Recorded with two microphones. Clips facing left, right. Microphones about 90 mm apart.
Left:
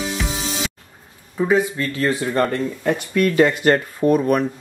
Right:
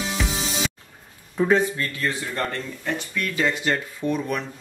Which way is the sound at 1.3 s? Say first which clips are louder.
Left 2 dB; 5° left (ahead or behind).